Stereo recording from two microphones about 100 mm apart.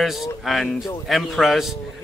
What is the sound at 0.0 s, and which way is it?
Speech, centre (ahead or behind).